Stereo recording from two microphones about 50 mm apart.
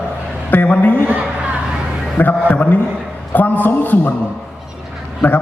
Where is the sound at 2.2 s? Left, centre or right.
Left.